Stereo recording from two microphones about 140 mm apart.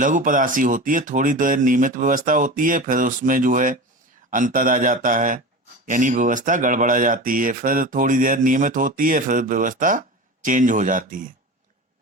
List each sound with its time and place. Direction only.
0.0 s speech: 70° right (ahead or behind)